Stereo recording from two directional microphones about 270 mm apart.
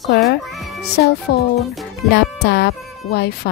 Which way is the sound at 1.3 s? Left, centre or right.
Left.